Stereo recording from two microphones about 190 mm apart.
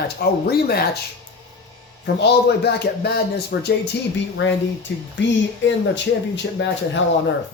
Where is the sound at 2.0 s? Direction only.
60° left (ahead or behind).